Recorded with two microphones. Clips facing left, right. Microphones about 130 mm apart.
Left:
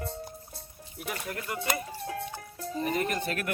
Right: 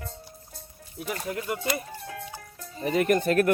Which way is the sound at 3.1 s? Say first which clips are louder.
Right 11 dB; 45° right (ahead or behind).